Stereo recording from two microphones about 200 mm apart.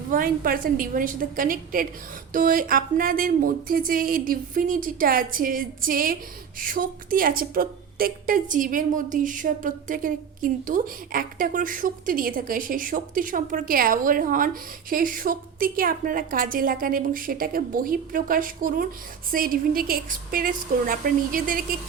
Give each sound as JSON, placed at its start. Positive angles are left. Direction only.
{"t": 0.1, "sound": "a woman's voice", "side_deg": -45}